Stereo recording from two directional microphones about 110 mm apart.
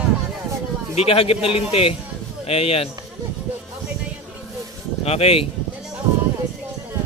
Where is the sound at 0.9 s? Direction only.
65° left (ahead or behind).